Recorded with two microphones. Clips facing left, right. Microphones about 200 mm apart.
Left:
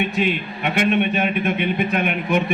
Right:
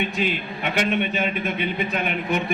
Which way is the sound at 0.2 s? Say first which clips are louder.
Left 4 dB; 55° left (ahead or behind).